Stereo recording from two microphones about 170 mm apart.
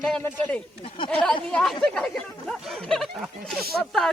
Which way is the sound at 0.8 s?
30° left (ahead or behind).